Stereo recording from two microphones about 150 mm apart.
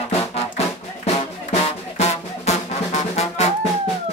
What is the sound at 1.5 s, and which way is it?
Music, 45° left (ahead or behind).